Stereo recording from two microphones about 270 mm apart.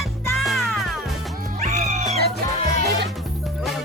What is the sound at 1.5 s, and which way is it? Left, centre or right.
Cat, right.